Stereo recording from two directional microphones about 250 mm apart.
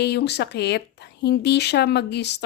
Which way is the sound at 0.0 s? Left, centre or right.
Left.